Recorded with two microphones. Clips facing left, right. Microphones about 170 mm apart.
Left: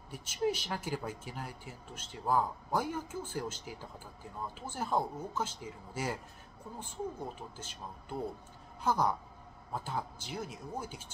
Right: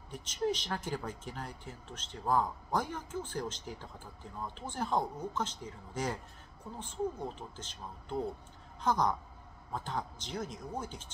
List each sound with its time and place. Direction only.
0.1 s speech: 10° left (ahead or behind)